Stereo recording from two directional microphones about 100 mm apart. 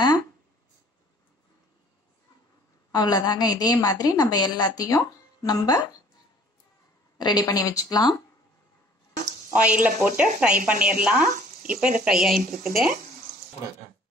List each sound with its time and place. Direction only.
2.9 s a woman's voice: 40° left (ahead or behind)
7.2 s a woman's voice: 45° left (ahead or behind)
9.5 s speech: 15° right (ahead or behind)